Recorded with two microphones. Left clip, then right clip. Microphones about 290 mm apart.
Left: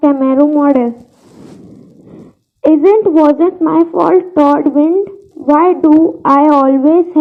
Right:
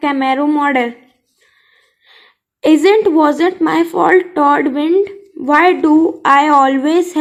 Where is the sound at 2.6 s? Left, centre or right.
Centre.